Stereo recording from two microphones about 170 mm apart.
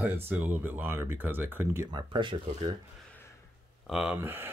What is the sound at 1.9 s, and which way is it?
Speech, 30° right (ahead or behind).